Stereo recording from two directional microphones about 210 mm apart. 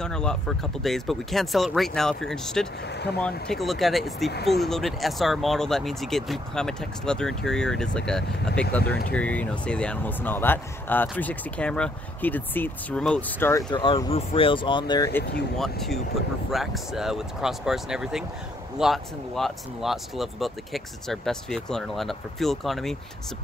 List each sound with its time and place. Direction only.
0.0 s speech: 5° left (ahead or behind)
2.9 s speech: 50° left (ahead or behind)
3.2 s speech: 5° left (ahead or behind); by 15.0 s 20° left (ahead or behind)
15.5 s speech: centre (ahead or behind)